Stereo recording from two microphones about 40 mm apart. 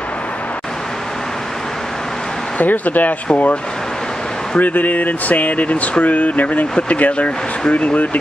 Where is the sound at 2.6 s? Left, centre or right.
Left.